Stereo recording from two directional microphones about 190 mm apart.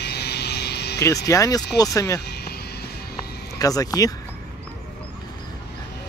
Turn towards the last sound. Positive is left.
turn(degrees=20)  # may be behind; listen again after turning